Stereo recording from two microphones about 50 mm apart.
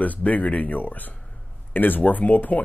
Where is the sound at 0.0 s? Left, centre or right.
Left.